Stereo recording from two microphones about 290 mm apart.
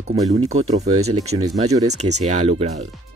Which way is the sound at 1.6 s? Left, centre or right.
Right.